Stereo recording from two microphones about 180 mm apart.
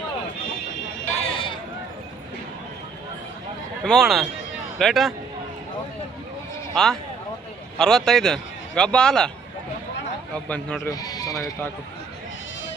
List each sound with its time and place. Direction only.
1.1 s a sound: 30° left (ahead or behind)
3.8 s a man's voice: centre (ahead or behind)
6.8 s a man's voice: 5° left (ahead or behind)
10.3 s a man's voice: 5° left (ahead or behind)
10.9 s speech: 20° left (ahead or behind)